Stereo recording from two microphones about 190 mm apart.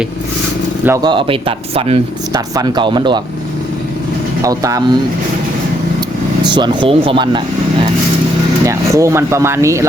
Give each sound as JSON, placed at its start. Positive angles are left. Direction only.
{"t": 0.9, "sound": "speech", "side_deg": -20}
{"t": 4.4, "sound": "speech", "side_deg": -15}
{"t": 6.4, "sound": "speech", "side_deg": -25}
{"t": 8.6, "sound": "speech", "side_deg": -15}